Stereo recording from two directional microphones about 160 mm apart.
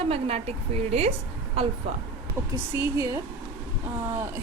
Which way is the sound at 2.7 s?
20° right (ahead or behind).